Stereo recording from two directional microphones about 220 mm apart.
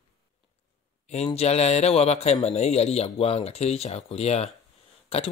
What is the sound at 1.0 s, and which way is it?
Speech, 30° left (ahead or behind).